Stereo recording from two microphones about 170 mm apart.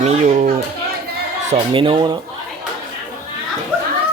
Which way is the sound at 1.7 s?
30° right (ahead or behind).